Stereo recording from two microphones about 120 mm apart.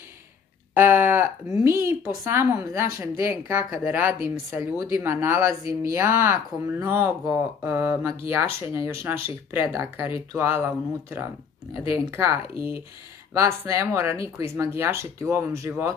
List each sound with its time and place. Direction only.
0.7 s speech: 20° right (ahead or behind)